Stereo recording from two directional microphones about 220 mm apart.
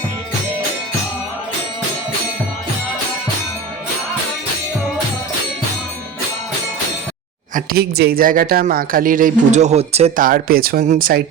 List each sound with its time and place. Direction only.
7.5 s speech: 45° right (ahead or behind)